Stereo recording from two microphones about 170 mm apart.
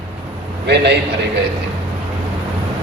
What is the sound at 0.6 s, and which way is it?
Speech, 80° right.